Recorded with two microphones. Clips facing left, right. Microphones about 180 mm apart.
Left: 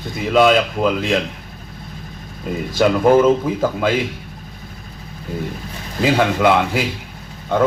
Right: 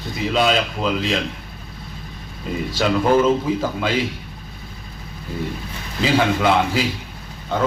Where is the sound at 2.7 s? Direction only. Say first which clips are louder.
Left 4 dB; 50° left (ahead or behind).